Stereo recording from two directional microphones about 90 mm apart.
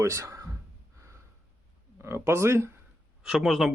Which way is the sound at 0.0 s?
35° right (ahead or behind).